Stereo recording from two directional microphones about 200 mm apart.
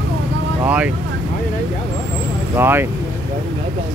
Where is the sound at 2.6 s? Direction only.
10° right (ahead or behind).